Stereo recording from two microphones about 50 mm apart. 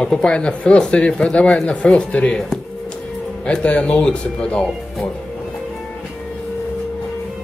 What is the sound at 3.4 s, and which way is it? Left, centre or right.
Speech, left.